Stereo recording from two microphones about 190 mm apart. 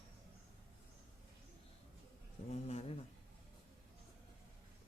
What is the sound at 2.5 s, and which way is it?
Speech, 35° left (ahead or behind).